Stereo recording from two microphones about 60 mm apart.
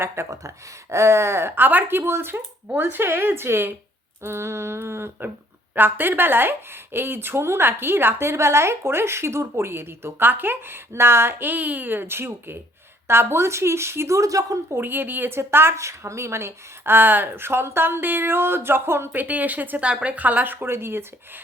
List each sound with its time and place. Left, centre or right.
0.3 s speech: right
14.2 s a woman's voice: right
14.7 s speech: right
19.1 s speech: right
19.9 s speech: centre; by 21.0 s right